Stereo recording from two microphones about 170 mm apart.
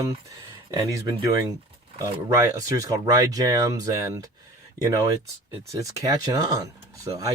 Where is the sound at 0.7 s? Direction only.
20° right (ahead or behind).